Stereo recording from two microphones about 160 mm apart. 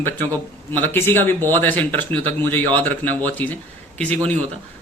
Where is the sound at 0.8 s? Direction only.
15° left (ahead or behind).